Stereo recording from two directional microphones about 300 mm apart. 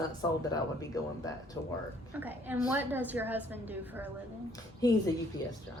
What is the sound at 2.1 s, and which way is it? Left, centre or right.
A woman's voice, centre.